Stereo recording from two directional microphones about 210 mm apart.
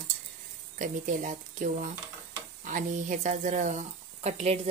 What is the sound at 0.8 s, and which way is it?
Speech, 40° right (ahead or behind).